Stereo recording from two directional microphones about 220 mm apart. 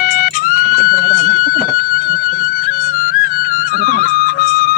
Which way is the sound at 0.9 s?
40° left (ahead or behind).